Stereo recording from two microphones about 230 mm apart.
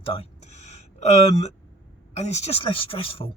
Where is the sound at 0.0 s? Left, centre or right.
Left.